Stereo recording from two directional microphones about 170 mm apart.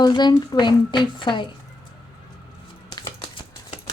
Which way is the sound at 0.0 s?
25° left (ahead or behind).